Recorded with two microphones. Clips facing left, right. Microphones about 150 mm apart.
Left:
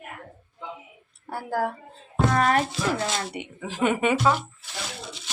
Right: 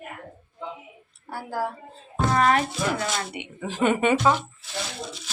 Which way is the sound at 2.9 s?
30° left (ahead or behind).